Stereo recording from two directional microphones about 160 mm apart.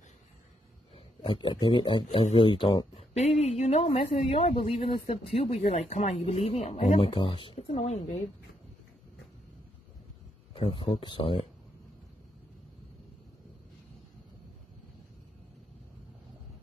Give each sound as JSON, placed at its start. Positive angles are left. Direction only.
{"t": 0.9, "sound": "a man's voice", "side_deg": 35}
{"t": 3.2, "sound": "speech", "side_deg": 45}
{"t": 10.5, "sound": "a man's voice", "side_deg": 35}